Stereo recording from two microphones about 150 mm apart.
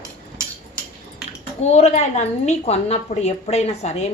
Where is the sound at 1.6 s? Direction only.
45° left (ahead or behind).